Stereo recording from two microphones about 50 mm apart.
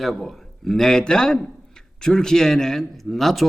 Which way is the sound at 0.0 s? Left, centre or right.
Centre.